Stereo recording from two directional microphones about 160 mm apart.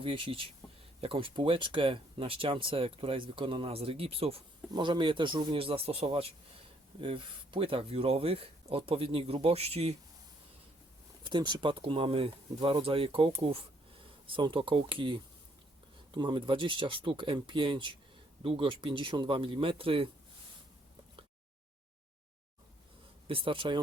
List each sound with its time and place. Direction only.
0.0 s speech: 35° right (ahead or behind)
11.2 s speech: 30° right (ahead or behind)
23.2 s speech: 35° right (ahead or behind)